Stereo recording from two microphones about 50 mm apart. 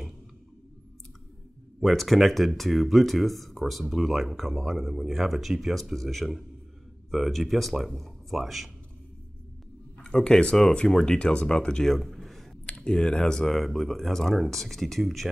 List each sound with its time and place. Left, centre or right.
1.8 s speech: centre
9.9 s speech: centre
11.1 s speech: centre
12.6 s speech: left; by 15.2 s centre